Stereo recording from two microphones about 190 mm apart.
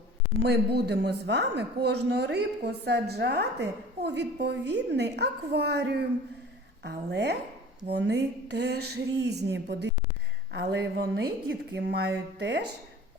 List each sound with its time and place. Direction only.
0.8 s a woman's voice: 60° right (ahead or behind)